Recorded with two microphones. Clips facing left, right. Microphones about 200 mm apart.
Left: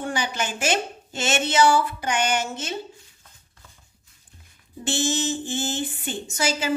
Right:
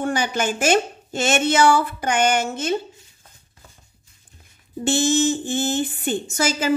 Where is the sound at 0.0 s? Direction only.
50° right (ahead or behind).